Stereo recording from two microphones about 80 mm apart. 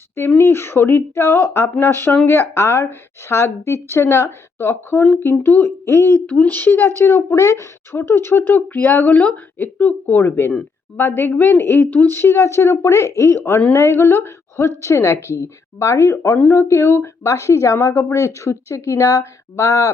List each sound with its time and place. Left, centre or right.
0.3 s a woman's voice: left